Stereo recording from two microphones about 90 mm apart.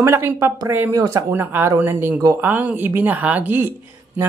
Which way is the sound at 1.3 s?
25° right (ahead or behind).